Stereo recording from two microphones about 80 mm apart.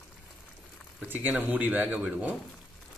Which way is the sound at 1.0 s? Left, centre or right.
Right.